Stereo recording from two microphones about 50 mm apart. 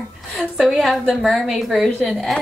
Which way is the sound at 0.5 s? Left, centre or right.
Centre.